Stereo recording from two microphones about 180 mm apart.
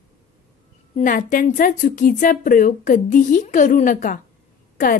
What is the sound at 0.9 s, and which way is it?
A woman's voice, 45° left (ahead or behind).